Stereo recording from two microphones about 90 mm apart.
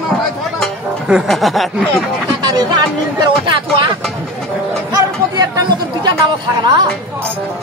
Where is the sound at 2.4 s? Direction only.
50° right (ahead or behind).